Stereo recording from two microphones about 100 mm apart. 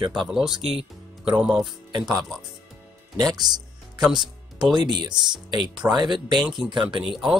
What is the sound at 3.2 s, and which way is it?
Speech, 40° right (ahead or behind).